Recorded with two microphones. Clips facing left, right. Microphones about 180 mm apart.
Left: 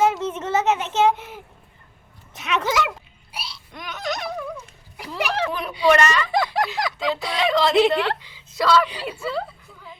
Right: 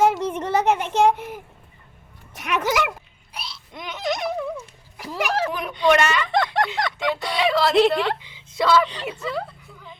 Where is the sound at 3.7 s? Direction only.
20° right (ahead or behind).